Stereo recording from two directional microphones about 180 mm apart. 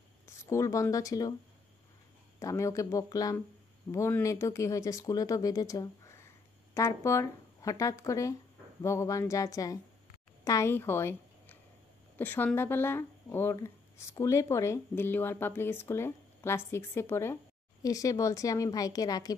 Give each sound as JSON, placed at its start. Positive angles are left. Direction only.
{"t": 0.5, "sound": "speech", "side_deg": 15}
{"t": 2.4, "sound": "a woman's voice", "side_deg": 15}